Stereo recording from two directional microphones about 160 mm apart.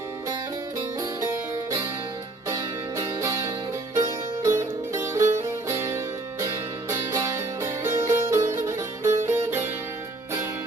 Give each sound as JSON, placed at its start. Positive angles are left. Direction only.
{"t": 3.0, "sound": "music", "side_deg": -20}